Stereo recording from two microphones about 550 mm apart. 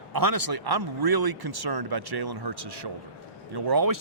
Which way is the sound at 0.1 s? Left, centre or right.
Right.